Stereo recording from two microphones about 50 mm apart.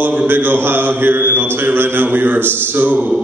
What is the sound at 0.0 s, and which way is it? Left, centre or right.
Mantra, right.